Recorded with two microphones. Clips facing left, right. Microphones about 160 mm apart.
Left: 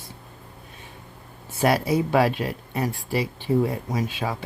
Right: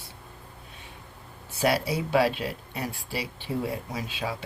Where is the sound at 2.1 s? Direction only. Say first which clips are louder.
Left 3 dB; 50° left (ahead or behind).